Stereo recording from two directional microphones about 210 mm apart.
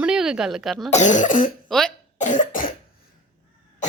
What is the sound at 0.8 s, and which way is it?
Speech, 35° left (ahead or behind).